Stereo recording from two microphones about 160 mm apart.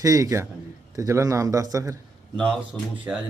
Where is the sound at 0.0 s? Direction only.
20° right (ahead or behind).